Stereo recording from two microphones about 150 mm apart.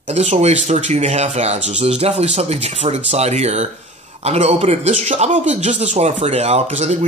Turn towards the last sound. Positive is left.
turn(degrees=-50)  # may be behind; listen again after turning